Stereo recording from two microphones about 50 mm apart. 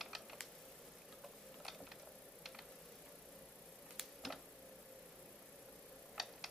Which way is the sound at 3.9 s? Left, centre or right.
Centre.